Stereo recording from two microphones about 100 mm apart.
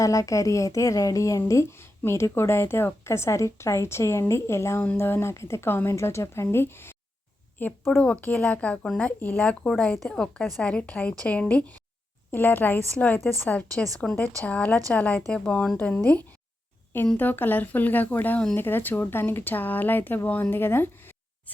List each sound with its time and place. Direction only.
0.0 s speech: 35° left (ahead or behind)
7.9 s speech: 15° left (ahead or behind)
17.2 s speech: 20° left (ahead or behind)